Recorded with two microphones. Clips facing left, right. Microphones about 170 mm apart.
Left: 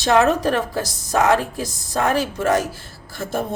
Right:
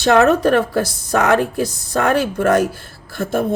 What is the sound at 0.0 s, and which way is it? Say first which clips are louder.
Speech: right 4 dB; 60° right (ahead or behind).